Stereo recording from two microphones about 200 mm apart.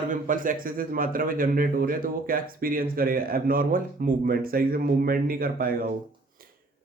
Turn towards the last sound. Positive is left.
turn(degrees=-45)  # may be behind; listen again after turning